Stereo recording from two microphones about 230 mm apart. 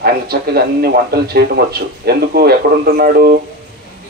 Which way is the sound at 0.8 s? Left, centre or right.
Right.